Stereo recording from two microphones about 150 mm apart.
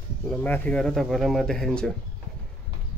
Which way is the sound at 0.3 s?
10° left (ahead or behind).